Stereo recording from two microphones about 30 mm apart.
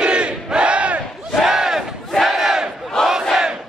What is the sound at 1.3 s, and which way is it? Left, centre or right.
Battle cry, centre.